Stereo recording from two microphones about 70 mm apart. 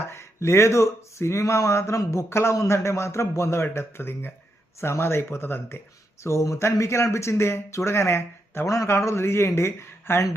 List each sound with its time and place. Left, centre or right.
0.0 s speech: left
6.2 s speech: left